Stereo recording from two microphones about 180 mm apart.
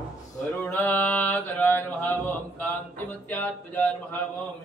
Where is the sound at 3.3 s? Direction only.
10° left (ahead or behind).